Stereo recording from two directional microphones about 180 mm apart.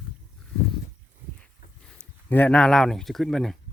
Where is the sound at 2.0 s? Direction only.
10° left (ahead or behind).